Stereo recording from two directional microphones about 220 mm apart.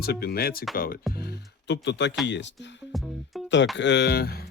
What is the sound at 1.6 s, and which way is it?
Speech, 55° left (ahead or behind).